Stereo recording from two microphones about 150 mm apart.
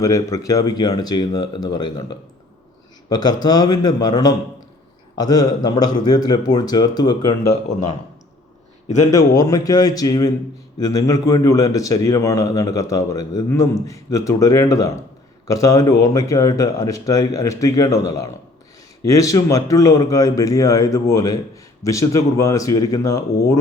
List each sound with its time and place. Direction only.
0.0 s a man's voice: 20° left (ahead or behind)
9.1 s a man's voice: 25° left (ahead or behind)